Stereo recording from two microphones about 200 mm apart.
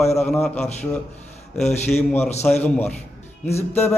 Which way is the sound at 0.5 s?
35° left (ahead or behind).